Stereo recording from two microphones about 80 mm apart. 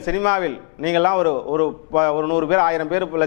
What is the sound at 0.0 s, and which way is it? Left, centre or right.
A man's voice, centre.